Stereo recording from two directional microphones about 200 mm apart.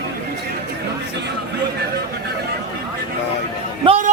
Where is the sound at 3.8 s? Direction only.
40° right (ahead or behind).